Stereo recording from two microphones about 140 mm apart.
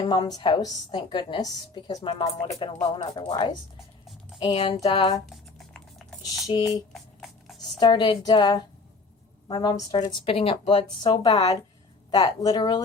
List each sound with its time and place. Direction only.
0.0 s a woman's voice: 30° left (ahead or behind)
5.2 s computer keyboard: 5° left (ahead or behind)
6.2 s speech: 25° left (ahead or behind)
6.9 s music: centre (ahead or behind)
7.8 s a woman's voice: 30° left (ahead or behind)
10.1 s a woman's voice: 40° left (ahead or behind)
10.8 s speech: 30° left (ahead or behind)